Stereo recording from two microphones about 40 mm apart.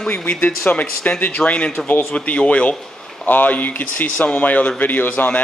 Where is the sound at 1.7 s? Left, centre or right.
Left.